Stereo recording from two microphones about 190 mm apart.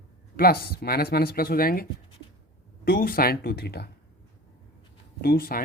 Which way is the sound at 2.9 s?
50° left (ahead or behind).